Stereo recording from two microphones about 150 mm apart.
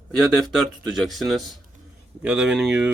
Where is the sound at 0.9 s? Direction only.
Centre (ahead or behind).